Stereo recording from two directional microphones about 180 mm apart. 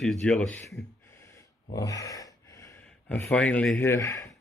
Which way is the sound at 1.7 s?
20° left (ahead or behind).